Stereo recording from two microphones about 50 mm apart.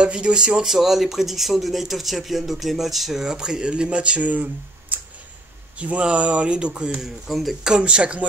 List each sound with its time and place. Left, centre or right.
0.0 s speech: centre
0.7 s speech: centre; by 6.9 s right
7.0 s speech: centre
7.6 s speech: centre